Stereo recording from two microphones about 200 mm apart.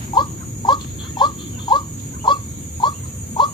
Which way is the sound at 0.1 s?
25° left (ahead or behind).